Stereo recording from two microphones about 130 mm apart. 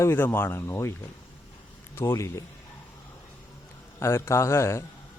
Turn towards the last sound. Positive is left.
turn(degrees=20)  # may be behind; listen again after turning